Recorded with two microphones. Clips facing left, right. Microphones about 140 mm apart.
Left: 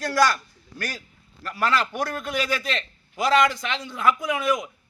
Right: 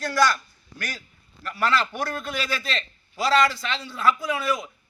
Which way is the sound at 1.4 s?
10° left (ahead or behind).